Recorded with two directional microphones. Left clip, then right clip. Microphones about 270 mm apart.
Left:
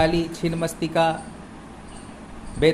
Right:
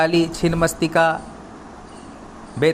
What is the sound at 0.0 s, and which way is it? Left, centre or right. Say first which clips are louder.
A woman's voice: right 4 dB; centre.